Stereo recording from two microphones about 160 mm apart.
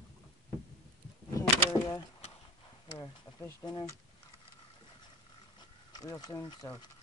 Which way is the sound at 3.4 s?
25° left (ahead or behind).